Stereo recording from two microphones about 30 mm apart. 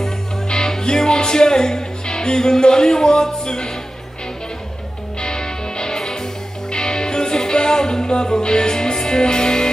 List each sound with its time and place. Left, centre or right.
0.5 s music: left
5.2 s music: left